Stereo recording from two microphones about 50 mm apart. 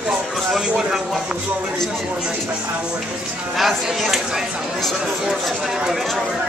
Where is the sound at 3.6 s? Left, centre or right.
Centre.